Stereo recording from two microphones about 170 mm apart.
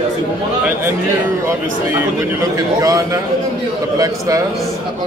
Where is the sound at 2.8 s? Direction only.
20° right (ahead or behind).